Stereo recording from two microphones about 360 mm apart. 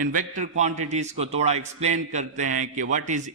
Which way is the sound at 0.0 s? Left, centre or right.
Right.